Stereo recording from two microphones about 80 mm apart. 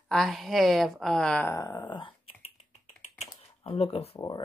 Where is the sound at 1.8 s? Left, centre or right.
Left.